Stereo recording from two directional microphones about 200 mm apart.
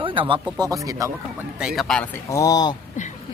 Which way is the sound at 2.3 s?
15° left (ahead or behind).